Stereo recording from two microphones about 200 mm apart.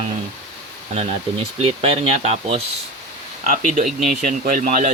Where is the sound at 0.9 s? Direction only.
30° right (ahead or behind).